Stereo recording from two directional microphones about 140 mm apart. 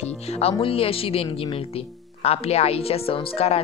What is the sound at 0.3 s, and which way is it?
A woman's voice, 45° left (ahead or behind).